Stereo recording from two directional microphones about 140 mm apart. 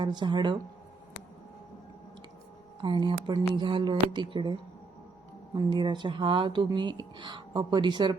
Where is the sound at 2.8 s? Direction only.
35° right (ahead or behind).